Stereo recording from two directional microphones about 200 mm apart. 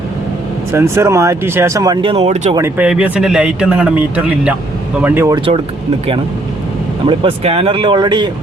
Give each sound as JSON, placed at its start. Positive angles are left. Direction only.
{"t": 0.7, "sound": "speech", "side_deg": -15}
{"t": 2.6, "sound": "speech", "side_deg": -10}
{"t": 7.1, "sound": "speech", "side_deg": -25}